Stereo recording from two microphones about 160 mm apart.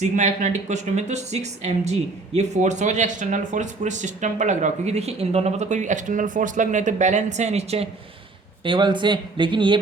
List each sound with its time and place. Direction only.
0.0 s speech: 45° right (ahead or behind)
8.6 s speech: 30° right (ahead or behind)